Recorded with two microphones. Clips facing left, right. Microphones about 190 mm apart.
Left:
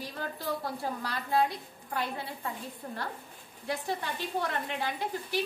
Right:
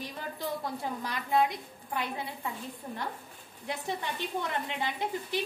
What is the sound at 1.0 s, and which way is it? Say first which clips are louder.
A woman's voice: right 1 dB; 20° right (ahead or behind).